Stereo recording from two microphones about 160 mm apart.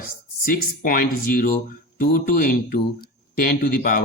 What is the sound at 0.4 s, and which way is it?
Speech, 65° left (ahead or behind).